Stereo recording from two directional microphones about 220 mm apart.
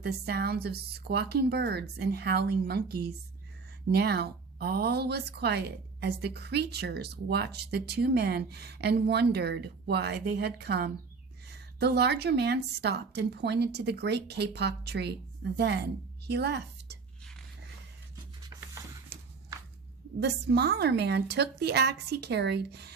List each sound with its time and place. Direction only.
0.0 s speech: 45° right (ahead or behind)
20.1 s speech: 50° right (ahead or behind)